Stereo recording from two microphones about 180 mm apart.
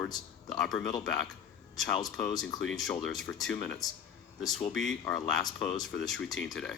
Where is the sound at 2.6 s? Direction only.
Centre (ahead or behind).